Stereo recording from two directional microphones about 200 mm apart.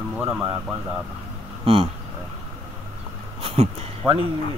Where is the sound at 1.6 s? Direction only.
25° right (ahead or behind).